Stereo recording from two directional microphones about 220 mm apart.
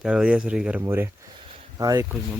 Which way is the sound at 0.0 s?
5° right (ahead or behind).